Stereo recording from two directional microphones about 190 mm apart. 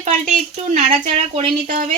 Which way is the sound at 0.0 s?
40° right (ahead or behind).